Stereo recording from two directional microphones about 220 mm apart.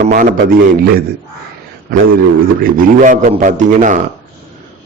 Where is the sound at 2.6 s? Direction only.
35° right (ahead or behind).